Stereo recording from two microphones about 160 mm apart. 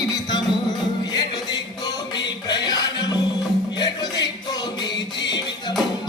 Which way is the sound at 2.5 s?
25° left (ahead or behind).